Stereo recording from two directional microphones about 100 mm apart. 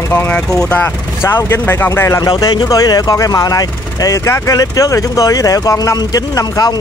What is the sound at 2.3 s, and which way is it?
Speech, 45° left (ahead or behind).